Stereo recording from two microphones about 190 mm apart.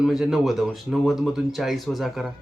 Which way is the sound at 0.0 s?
Centre (ahead or behind).